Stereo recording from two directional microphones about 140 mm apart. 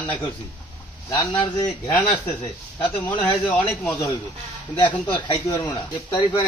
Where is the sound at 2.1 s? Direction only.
20° left (ahead or behind).